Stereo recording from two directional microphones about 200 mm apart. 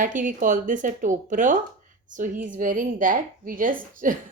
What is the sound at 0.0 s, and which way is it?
A woman's voice, 40° right (ahead or behind).